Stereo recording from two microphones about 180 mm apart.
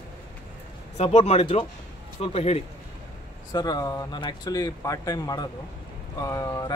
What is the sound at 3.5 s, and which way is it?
Speech, 20° left (ahead or behind).